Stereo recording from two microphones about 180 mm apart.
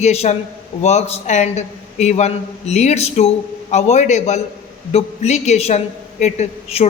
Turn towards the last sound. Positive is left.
turn(degrees=35)  # may be behind; listen again after turning